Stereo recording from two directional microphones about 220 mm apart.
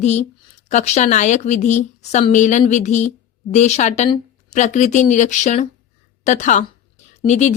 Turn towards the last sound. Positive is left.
turn(degrees=30)  # may be behind; listen again after turning